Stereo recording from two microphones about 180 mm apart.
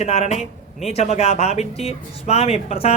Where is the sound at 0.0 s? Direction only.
35° left (ahead or behind).